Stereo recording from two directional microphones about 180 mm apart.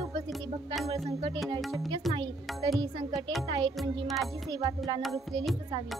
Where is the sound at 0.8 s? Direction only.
35° right (ahead or behind).